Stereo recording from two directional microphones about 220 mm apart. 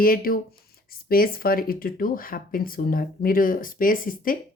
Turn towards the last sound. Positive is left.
turn(degrees=40)  # may be behind; listen again after turning